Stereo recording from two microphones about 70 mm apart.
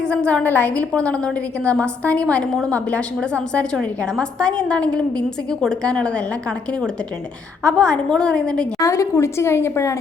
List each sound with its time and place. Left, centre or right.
0.0 s a woman's voice: centre
0.4 s a woman's voice: left
7.6 s a woman's voice: centre
8.8 s a woman's voice: left